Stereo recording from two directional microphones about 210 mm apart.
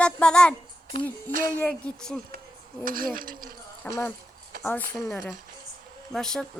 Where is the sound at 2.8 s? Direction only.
40° right (ahead or behind).